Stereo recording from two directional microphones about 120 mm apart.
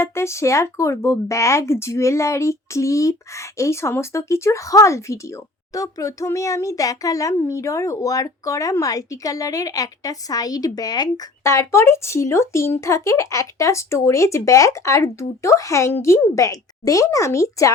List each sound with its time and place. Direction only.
0.0 s speech: 20° left (ahead or behind)